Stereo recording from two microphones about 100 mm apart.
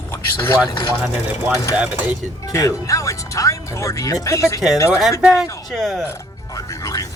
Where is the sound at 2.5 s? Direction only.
30° left (ahead or behind).